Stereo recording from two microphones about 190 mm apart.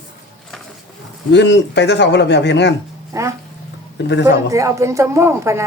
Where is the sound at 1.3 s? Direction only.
65° left (ahead or behind).